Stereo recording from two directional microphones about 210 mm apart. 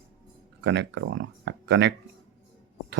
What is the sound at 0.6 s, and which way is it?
Speech, 55° right (ahead or behind).